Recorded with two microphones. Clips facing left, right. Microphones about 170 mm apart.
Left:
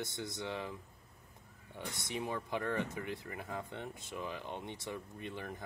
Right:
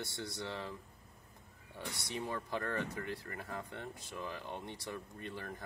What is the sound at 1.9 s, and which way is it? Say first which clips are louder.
Speech: left 2 dB; 20° left (ahead or behind).